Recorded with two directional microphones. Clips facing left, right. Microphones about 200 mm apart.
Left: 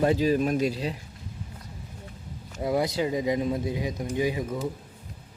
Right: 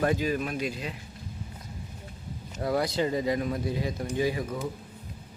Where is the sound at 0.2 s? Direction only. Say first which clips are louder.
Left 6 dB; 35° left (ahead or behind).